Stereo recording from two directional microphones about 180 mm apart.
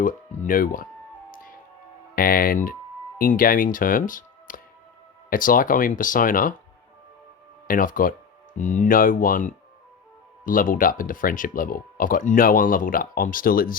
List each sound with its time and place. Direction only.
0.0 s speech: 50° left (ahead or behind)
2.1 s speech: 55° left (ahead or behind)
7.7 s speech: 50° left (ahead or behind)